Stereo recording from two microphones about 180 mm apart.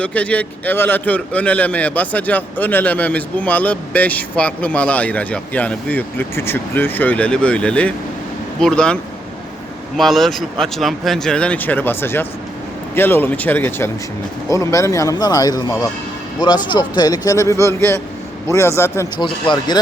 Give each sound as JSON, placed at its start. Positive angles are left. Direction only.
{"t": 0.0, "sound": "a man's voice", "side_deg": 5}
{"t": 10.0, "sound": "a man's voice", "side_deg": 0}
{"t": 19.2, "sound": "speech", "side_deg": 25}